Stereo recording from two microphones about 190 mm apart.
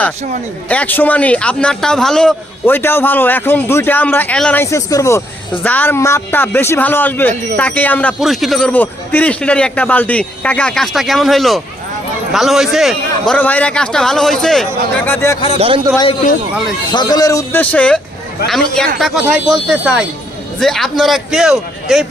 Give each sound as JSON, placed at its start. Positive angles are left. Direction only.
{"t": 0.7, "sound": "a man's voice", "side_deg": 10}
{"t": 15.5, "sound": "a man's voice", "side_deg": -30}
{"t": 16.9, "sound": "a man's voice", "side_deg": 20}